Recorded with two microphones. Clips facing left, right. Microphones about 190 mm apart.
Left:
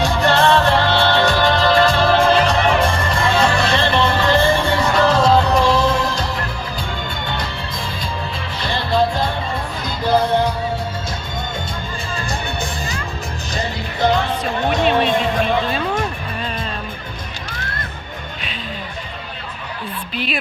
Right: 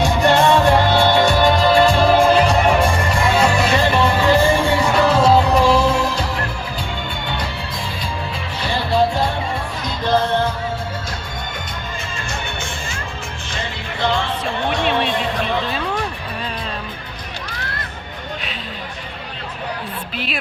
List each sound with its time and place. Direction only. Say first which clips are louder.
0.0 s music: right 1 dB; 15° right (ahead or behind)
8.6 s music: even; 5° right (ahead or behind)
10.1 s music: left 2 dB; 15° left (ahead or behind)
14.0 s music: left 3 dB; 40° left (ahead or behind)
20.1 s music: left 3 dB; centre (ahead or behind)